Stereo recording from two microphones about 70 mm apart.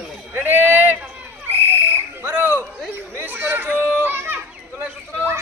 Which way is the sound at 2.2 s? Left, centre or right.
Right.